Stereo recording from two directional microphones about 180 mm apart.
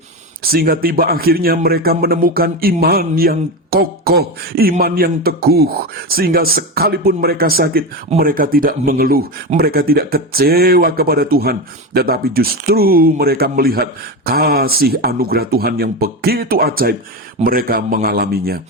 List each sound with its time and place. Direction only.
0.4 s a man's voice: 55° right (ahead or behind)